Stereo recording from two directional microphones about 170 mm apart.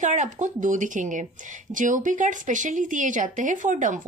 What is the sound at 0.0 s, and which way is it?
Speech, 45° right (ahead or behind).